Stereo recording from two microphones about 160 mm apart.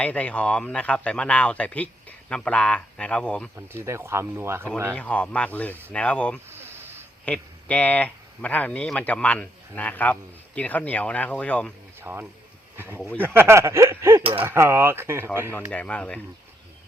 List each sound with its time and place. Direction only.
0.0 s speech: 10° left (ahead or behind)
3.5 s speech: 15° right (ahead or behind)
4.9 s speech: 10° left (ahead or behind)
6.5 s a sound: 15° right (ahead or behind)
7.3 s speech: 10° left (ahead or behind)
11.9 s speech: 15° right (ahead or behind)
15.7 s speech: 10° left (ahead or behind)